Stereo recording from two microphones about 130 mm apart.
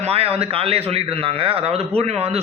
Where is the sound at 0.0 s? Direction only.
50° right (ahead or behind).